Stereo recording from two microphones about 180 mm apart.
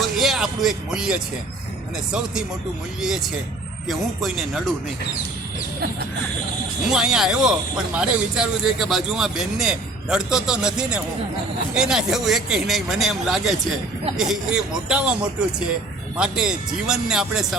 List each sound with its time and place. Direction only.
0.0 s speech: centre (ahead or behind)
3.8 s a man's voice: centre (ahead or behind)
6.9 s a man's voice: 5° right (ahead or behind)